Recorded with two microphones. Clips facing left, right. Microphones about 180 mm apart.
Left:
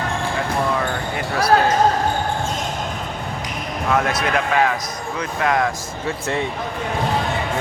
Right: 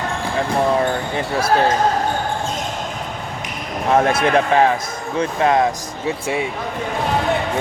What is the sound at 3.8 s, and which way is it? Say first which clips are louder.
Speech: right 5 dB; 30° right (ahead or behind).